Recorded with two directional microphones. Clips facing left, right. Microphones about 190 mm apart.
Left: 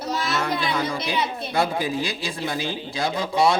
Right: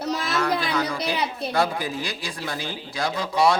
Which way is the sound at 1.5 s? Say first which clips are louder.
Left 2 dB; 25° left (ahead or behind).